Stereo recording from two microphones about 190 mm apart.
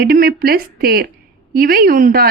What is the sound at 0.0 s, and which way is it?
Speech, 55° right (ahead or behind).